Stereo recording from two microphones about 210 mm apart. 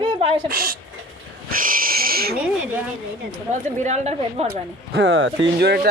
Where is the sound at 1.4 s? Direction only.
40° right (ahead or behind).